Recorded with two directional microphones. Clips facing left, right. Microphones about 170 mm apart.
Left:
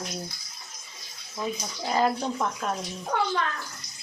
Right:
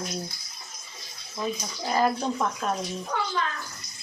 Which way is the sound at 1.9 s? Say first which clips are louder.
Even; 20° left (ahead or behind).